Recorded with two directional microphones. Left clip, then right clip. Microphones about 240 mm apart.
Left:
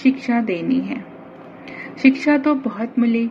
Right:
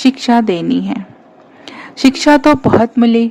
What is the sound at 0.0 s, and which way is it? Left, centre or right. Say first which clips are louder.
A woman's voice: right 8 dB; right.